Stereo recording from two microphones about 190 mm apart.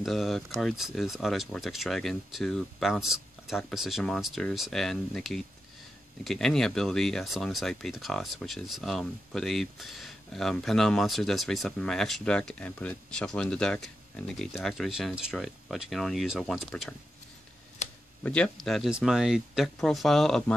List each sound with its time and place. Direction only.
0.0 s speech: centre (ahead or behind)
17.8 s a sound: 35° left (ahead or behind)
18.2 s speech: 5° left (ahead or behind)